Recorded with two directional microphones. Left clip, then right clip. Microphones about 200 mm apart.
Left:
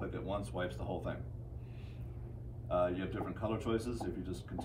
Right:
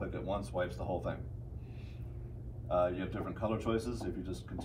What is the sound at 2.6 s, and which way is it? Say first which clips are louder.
Speech: right 2 dB; 5° right (ahead or behind).